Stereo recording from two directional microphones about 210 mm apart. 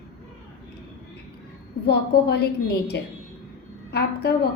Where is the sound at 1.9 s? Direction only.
50° left (ahead or behind).